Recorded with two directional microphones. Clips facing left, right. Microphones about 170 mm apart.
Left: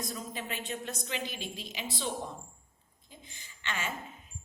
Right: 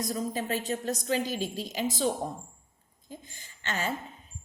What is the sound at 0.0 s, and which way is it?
A woman's voice, 40° right (ahead or behind).